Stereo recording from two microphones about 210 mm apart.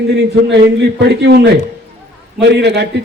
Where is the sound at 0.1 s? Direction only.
55° right (ahead or behind).